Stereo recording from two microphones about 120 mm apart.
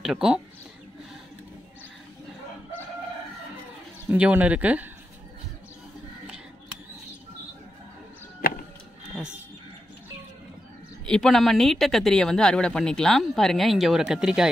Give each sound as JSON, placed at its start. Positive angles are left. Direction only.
{"t": 0.0, "sound": "speech", "side_deg": -5}
{"t": 4.1, "sound": "speech", "side_deg": -10}
{"t": 11.1, "sound": "speech", "side_deg": 5}